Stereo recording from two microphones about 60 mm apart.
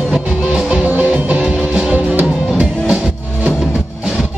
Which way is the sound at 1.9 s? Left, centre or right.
Right.